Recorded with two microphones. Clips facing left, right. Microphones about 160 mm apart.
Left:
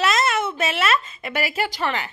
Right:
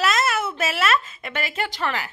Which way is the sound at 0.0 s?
Centre (ahead or behind).